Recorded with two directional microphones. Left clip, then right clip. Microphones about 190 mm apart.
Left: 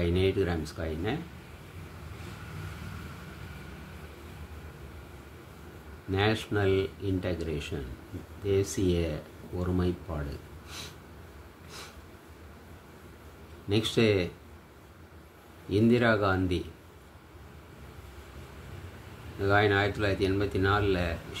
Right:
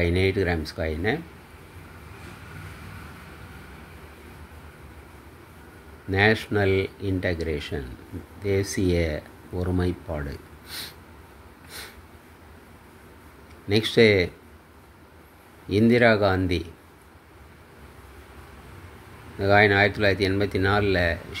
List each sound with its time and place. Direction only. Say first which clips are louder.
0.0 s speech: right 5 dB; 25° right (ahead or behind)
6.1 s speech: right 7 dB; 20° right (ahead or behind)
13.7 s speech: right 8 dB; 20° right (ahead or behind)
15.7 s speech: right 6 dB; 25° right (ahead or behind)
19.4 s speech: right 7 dB; 25° right (ahead or behind)